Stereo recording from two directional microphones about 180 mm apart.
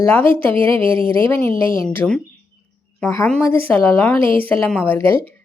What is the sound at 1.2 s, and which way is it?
Speech, 15° left (ahead or behind).